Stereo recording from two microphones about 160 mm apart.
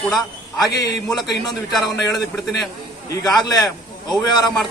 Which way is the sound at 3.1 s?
25° left (ahead or behind).